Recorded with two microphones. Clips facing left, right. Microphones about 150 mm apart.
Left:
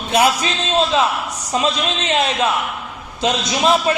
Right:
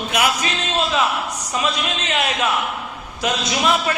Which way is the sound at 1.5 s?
25° left (ahead or behind).